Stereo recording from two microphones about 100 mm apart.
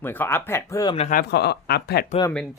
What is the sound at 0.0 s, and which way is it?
Speech, 20° left (ahead or behind).